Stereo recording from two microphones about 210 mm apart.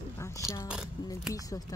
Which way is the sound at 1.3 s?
15° left (ahead or behind).